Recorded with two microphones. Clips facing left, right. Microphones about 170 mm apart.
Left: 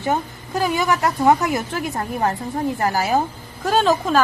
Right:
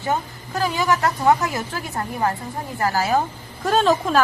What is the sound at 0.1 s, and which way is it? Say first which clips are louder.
A woman's voice: left 2 dB; 15° left (ahead or behind).